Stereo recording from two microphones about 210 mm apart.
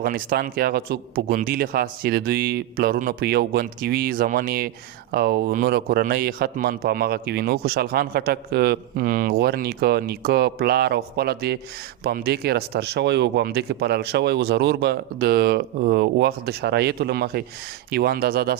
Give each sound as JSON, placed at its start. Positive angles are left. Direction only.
{"t": 0.0, "sound": "a man's voice", "side_deg": -45}